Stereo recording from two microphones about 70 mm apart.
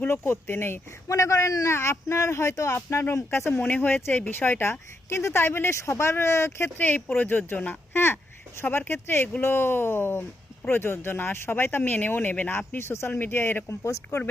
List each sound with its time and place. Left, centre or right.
0.3 s speech: left
1.0 s a man's voice: left
1.7 s speech: left
3.7 s speech: left
6.7 s speech: left